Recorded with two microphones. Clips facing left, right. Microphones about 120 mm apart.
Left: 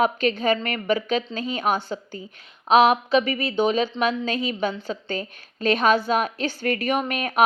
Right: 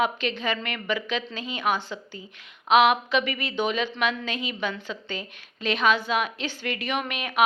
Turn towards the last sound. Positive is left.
turn(degrees=40)  # may be behind; listen again after turning